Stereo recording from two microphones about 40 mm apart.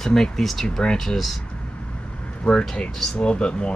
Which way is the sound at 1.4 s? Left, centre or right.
Left.